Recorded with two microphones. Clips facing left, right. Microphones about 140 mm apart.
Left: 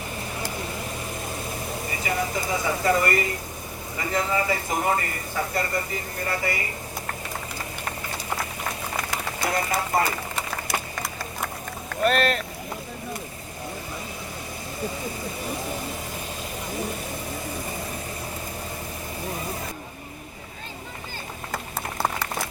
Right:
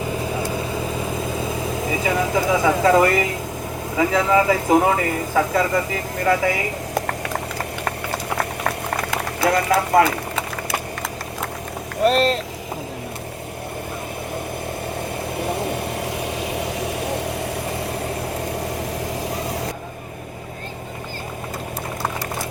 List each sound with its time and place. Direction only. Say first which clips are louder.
1.9 s speech: right 7 dB; 90° right
8.9 s a sound: right 6 dB; 90° right
12.0 s speech: right 5 dB; 30° right (ahead or behind)
16.0 s vehicle: right 8 dB; 75° right (ahead or behind)